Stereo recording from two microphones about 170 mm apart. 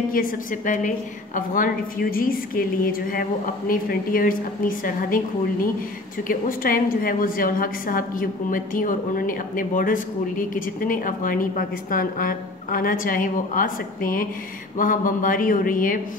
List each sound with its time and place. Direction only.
0.1 s a woman's voice: 55° left (ahead or behind)
6.2 s a woman's voice: 55° left (ahead or behind)